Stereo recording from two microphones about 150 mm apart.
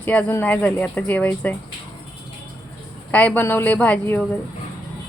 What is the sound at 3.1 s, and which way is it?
Speech, 10° left (ahead or behind).